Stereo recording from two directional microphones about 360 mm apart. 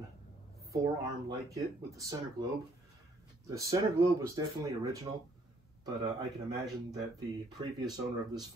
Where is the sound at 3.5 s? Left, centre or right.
Centre.